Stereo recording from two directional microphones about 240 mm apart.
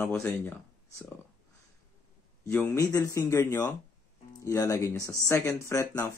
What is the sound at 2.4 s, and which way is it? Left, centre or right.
Speech, centre.